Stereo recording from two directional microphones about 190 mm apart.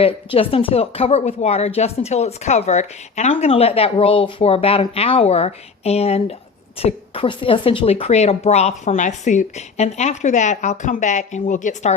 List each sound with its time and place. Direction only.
0.0 s speech: 30° left (ahead or behind)